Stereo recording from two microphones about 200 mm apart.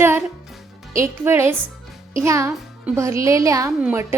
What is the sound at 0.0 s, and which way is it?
Music, 10° right (ahead or behind).